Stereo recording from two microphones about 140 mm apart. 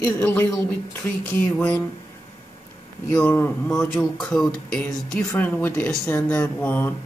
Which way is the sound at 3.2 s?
15° left (ahead or behind).